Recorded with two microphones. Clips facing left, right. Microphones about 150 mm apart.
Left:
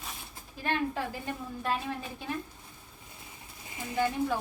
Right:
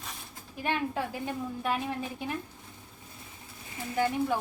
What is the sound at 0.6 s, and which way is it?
A woman's voice, 15° right (ahead or behind).